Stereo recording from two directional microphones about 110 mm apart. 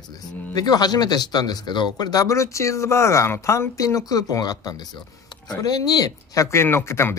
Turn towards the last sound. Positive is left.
turn(degrees=25)  # may be behind; listen again after turning